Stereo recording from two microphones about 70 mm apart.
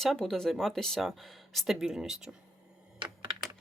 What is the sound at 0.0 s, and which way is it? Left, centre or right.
Speech, centre.